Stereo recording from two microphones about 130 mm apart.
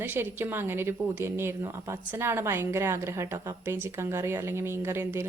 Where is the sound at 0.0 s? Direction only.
15° right (ahead or behind).